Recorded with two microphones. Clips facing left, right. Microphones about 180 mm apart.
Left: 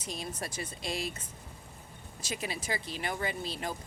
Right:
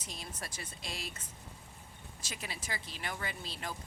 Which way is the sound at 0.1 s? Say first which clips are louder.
Left 8 dB; 15° left (ahead or behind).